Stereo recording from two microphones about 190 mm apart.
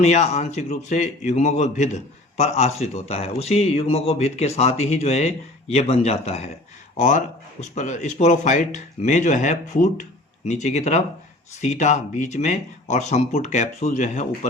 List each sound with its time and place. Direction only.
0.0 s a man's voice: 35° left (ahead or behind)